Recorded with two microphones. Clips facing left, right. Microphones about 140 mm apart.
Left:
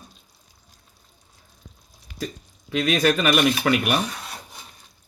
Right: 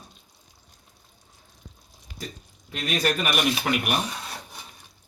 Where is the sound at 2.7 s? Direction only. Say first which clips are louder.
Left 6 dB; 90° left.